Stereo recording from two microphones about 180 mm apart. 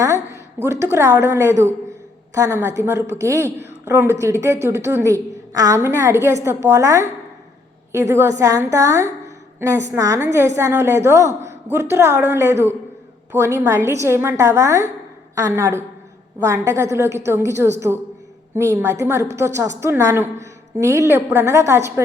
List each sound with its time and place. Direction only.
0.0 s a woman's voice: 15° right (ahead or behind)